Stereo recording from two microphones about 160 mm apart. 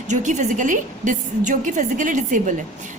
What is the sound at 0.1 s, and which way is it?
A woman's voice, 50° right (ahead or behind).